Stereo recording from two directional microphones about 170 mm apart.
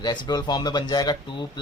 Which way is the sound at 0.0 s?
25° left (ahead or behind).